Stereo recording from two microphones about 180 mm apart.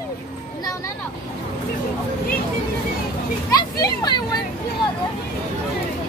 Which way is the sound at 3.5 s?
20° left (ahead or behind).